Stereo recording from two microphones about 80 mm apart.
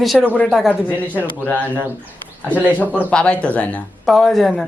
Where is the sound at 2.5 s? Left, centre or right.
Centre.